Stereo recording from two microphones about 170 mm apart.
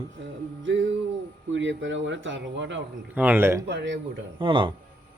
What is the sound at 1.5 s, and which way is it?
Speech, 90° right.